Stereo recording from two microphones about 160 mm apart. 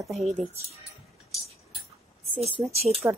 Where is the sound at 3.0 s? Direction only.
15° right (ahead or behind).